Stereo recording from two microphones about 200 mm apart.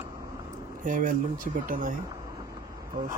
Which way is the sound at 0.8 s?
45° right (ahead or behind).